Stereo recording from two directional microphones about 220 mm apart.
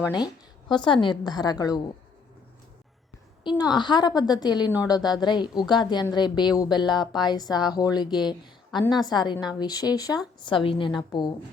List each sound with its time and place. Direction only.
0.7 s a woman's voice: 20° left (ahead or behind)
3.4 s a woman's voice: 20° left (ahead or behind)